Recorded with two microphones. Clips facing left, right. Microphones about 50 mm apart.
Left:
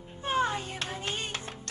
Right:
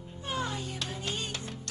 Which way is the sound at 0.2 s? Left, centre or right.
Left.